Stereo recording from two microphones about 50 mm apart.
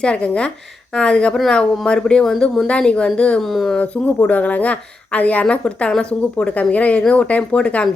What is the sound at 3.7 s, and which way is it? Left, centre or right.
A woman's voice, left.